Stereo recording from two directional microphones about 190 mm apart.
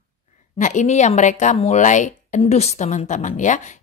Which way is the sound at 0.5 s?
40° left (ahead or behind).